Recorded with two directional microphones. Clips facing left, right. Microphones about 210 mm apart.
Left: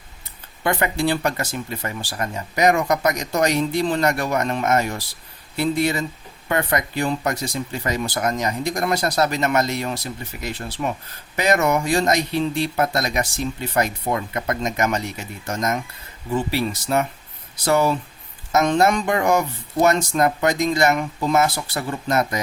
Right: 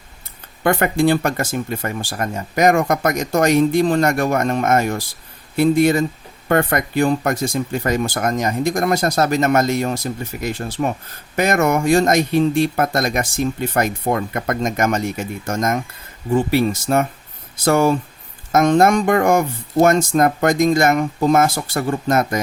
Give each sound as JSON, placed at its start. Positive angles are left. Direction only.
{"t": 0.6, "sound": "speech", "side_deg": -50}